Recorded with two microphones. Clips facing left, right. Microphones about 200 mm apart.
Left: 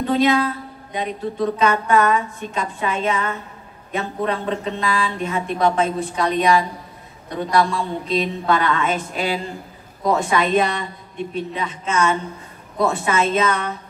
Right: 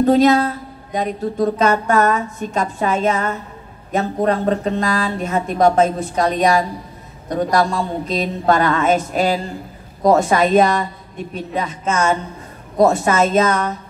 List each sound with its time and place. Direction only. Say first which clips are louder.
0.0 s speech: right 5 dB; 45° right (ahead or behind)